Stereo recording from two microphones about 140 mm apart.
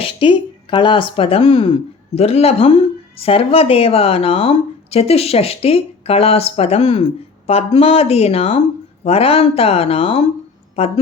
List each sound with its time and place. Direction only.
0.0 s a woman's voice: 35° left (ahead or behind)